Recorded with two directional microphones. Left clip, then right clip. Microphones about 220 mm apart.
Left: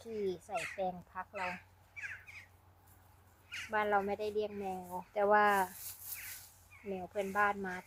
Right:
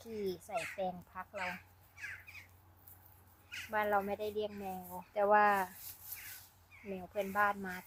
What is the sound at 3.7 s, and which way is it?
Speech, 10° left (ahead or behind).